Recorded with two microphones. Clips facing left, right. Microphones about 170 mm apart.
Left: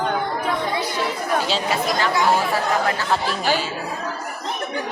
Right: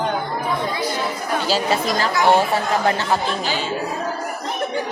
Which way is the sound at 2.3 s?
25° right (ahead or behind).